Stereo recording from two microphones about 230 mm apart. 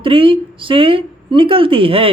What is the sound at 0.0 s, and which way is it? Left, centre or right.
A woman's voice, right.